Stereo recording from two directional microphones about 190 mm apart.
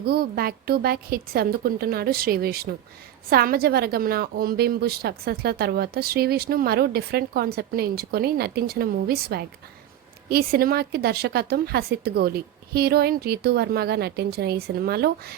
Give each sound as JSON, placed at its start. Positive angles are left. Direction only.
{"t": 0.0, "sound": "a woman's voice", "side_deg": -55}